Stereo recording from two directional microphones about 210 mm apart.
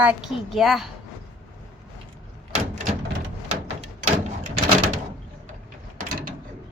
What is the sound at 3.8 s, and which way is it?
Door, 35° right (ahead or behind).